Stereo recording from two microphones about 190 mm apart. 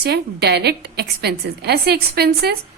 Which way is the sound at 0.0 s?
60° right (ahead or behind).